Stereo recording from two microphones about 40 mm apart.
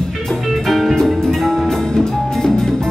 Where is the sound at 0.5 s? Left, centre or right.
Centre.